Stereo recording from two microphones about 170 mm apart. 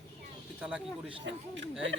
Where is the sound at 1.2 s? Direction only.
90° right.